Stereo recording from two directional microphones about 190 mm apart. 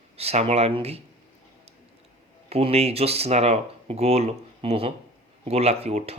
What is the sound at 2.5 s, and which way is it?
Speech, 35° right (ahead or behind).